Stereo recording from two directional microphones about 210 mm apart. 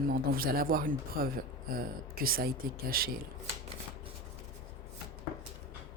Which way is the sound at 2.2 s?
45° right (ahead or behind).